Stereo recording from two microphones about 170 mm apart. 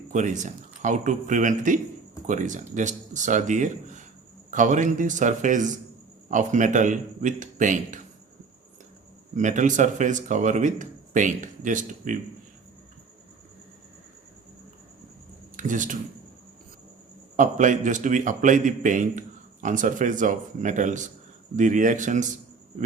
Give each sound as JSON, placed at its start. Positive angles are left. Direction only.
{"t": 0.1, "sound": "speech", "side_deg": -45}
{"t": 9.3, "sound": "speech", "side_deg": -45}
{"t": 15.5, "sound": "speech", "side_deg": -50}
{"t": 17.3, "sound": "speech", "side_deg": -50}